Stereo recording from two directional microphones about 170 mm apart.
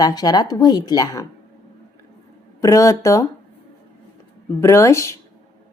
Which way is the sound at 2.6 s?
20° left (ahead or behind).